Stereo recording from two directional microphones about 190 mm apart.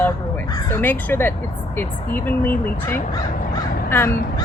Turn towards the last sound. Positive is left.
turn(degrees=15)  # may be behind; listen again after turning